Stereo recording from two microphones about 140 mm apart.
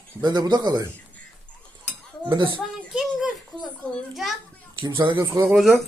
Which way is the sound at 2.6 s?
Centre (ahead or behind).